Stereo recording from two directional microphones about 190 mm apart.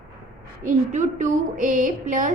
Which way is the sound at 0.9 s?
40° right (ahead or behind).